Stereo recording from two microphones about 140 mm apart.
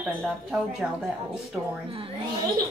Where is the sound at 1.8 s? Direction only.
40° right (ahead or behind).